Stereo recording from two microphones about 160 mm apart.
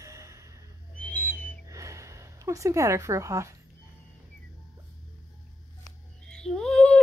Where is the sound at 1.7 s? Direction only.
20° right (ahead or behind).